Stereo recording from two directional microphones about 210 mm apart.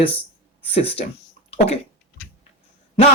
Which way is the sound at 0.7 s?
25° left (ahead or behind).